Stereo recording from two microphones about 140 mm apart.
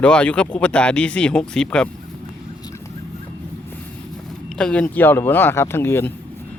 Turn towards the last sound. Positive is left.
turn(degrees=15)  # may be behind; listen again after turning